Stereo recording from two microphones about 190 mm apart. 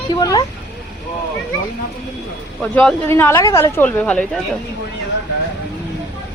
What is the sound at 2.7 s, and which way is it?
Speech, 10° left (ahead or behind).